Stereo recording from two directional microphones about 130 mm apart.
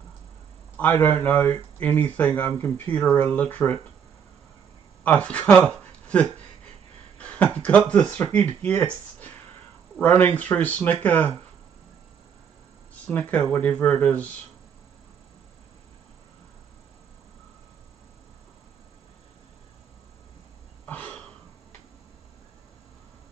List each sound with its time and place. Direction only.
0.7 s speech: 15° left (ahead or behind)
5.0 s speech: 10° left (ahead or behind)
7.2 s a sound: 10° left (ahead or behind)
7.5 s speech: 10° left (ahead or behind)
13.0 s speech: 10° left (ahead or behind)
20.8 s a sound: 10° left (ahead or behind)